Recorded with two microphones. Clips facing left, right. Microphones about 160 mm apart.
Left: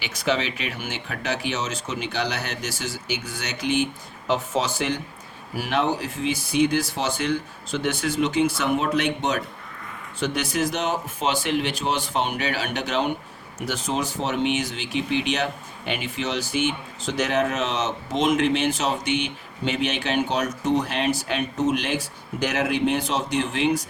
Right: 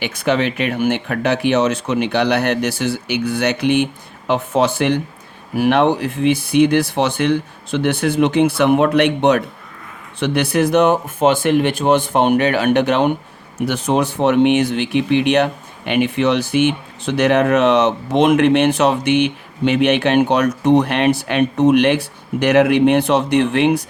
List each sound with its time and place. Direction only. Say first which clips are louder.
0.0 s speech: right 7 dB; 55° right (ahead or behind)